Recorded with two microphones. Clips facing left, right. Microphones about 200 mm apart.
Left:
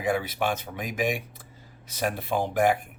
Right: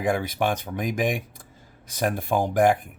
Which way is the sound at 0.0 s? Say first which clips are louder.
Right 2 dB; 45° right (ahead or behind).